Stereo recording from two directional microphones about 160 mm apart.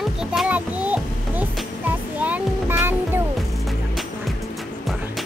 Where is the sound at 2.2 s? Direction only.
10° right (ahead or behind).